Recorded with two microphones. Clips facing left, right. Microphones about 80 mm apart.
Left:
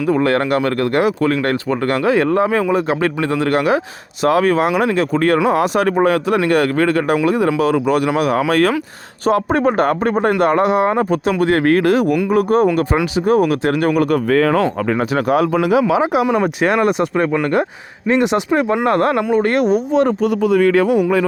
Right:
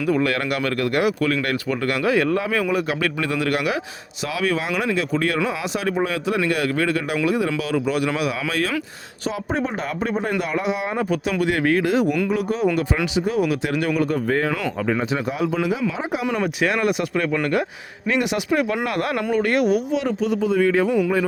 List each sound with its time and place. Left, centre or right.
0.1 s speech: left
4.2 s speech: left
14.8 s speech: left
16.3 s speech: left
18.1 s speech: left
20.4 s a man's voice: left